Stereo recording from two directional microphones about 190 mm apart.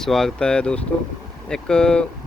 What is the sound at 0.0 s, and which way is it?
Speech, centre (ahead or behind).